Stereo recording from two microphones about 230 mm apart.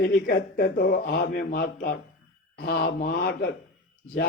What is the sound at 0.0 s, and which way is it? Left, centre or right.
A man's voice, left.